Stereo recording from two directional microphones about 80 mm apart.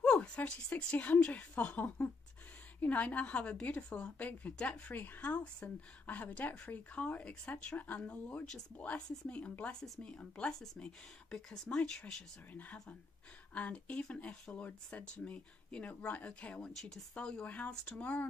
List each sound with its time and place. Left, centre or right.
0.0 s a woman's voice: centre